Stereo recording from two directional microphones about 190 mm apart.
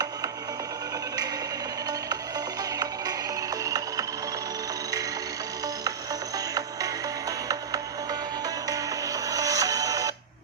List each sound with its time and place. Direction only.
3.6 s music: 20° right (ahead or behind)
6.3 s music: 20° right (ahead or behind)